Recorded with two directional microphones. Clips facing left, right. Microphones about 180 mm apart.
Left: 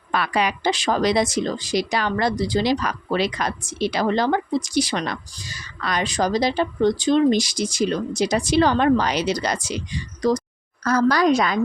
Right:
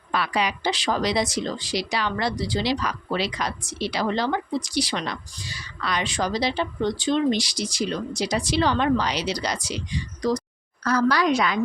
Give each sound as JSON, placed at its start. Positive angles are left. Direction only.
{"t": 0.1, "sound": "speech", "side_deg": 55}